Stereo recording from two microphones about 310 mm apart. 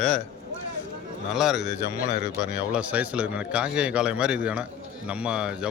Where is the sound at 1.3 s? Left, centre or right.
Centre.